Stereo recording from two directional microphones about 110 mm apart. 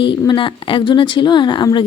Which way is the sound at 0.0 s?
45° left (ahead or behind).